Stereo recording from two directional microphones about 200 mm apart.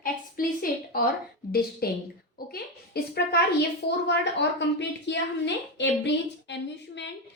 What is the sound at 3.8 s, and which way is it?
A woman's voice, 55° left (ahead or behind).